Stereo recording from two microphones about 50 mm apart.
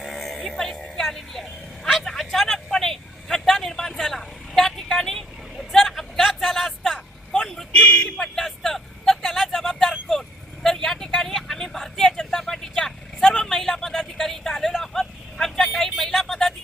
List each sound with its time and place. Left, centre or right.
0.0 s music: centre
1.0 s vehicle: centre
7.8 s vehicle: left
8.0 s vehicle: centre
14.2 s a sound: centre
14.5 s vehicle: centre